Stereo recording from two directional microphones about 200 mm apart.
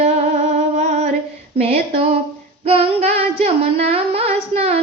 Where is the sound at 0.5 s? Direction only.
35° right (ahead or behind).